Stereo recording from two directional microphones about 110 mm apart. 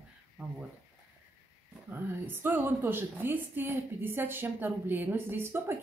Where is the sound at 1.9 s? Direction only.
20° right (ahead or behind).